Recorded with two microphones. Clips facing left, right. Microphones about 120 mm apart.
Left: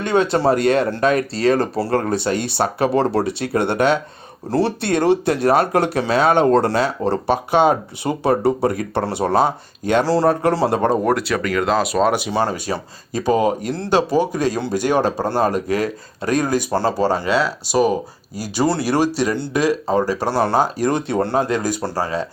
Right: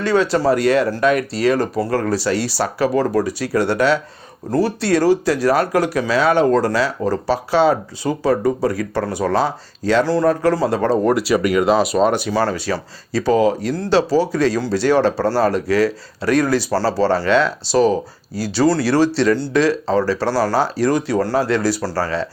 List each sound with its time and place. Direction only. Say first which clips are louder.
0.0 s speech: even; 20° left (ahead or behind)
10.0 s speech: even; 35° left (ahead or behind)
11.0 s speech: right 3 dB; centre (ahead or behind)
12.3 s speech: right 1 dB; 20° left (ahead or behind)